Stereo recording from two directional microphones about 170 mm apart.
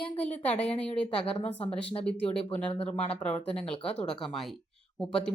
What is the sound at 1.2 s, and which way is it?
Speech, 35° left (ahead or behind).